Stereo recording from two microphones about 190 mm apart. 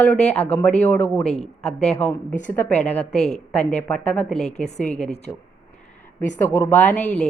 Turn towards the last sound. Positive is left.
turn(degrees=10)  # may be behind; listen again after turning